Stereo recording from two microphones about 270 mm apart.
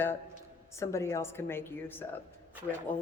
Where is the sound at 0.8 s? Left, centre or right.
Centre.